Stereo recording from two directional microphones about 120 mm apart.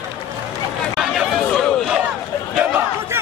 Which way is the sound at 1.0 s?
5° right (ahead or behind).